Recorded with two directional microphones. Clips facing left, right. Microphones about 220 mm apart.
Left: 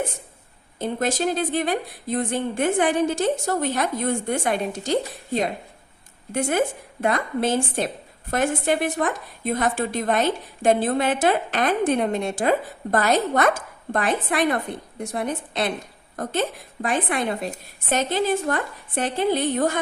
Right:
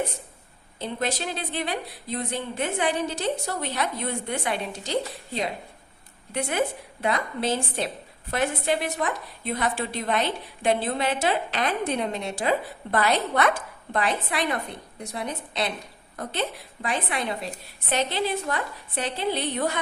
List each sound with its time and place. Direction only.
0.8 s a woman's voice: 45° left (ahead or behind)